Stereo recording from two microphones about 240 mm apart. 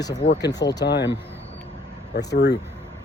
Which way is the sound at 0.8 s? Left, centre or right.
Left.